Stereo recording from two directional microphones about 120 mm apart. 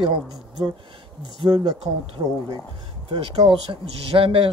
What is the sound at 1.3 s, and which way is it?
Speech, 35° right (ahead or behind).